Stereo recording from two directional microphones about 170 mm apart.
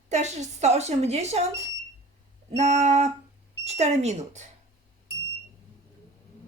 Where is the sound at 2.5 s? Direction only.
45° right (ahead or behind).